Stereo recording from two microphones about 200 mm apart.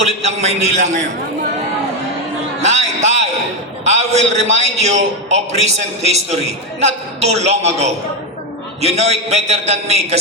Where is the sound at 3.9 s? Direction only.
35° right (ahead or behind).